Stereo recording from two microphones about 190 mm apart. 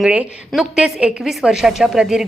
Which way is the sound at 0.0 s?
5° right (ahead or behind).